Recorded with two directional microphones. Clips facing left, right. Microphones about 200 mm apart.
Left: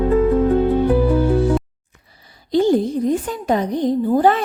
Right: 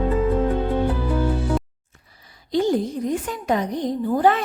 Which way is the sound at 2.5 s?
30° left (ahead or behind).